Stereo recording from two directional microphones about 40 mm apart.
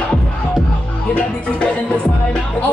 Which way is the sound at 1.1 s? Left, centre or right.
Left.